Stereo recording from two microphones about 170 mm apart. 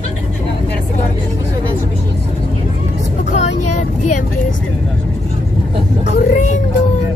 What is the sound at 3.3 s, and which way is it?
Vehicle, 45° left (ahead or behind).